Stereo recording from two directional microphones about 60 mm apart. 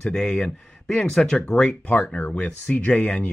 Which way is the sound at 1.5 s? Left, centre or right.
Left.